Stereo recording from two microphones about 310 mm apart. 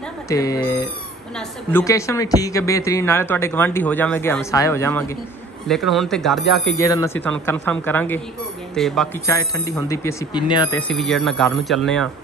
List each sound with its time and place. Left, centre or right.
0.3 s speech: centre